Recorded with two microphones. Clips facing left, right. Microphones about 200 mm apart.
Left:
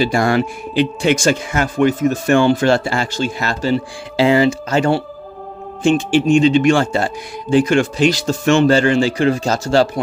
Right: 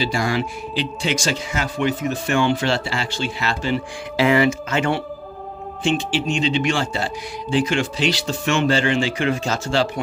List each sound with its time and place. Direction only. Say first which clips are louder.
0.0 s speech: left 6 dB; 55° left (ahead or behind)